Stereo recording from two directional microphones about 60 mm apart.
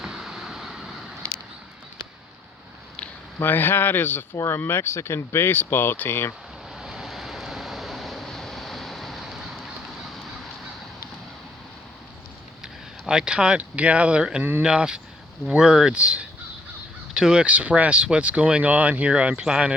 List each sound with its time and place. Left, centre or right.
0.0 s vehicle: centre
3.3 s speech: left
6.7 s vehicle: centre
12.6 s speech: centre
17.4 s speech: right